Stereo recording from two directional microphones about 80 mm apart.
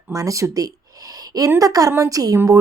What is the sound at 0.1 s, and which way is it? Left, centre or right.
A woman's voice, right.